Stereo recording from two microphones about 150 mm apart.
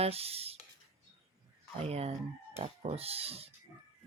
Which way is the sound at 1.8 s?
45° right (ahead or behind).